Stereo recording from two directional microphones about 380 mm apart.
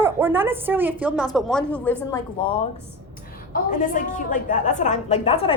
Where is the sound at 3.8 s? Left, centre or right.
Centre.